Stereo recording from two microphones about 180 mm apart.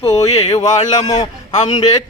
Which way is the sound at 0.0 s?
15° left (ahead or behind).